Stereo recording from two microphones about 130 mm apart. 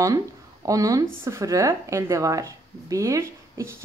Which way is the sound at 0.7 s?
25° right (ahead or behind).